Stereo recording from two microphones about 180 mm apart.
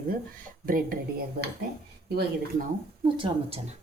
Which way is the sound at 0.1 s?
50° right (ahead or behind).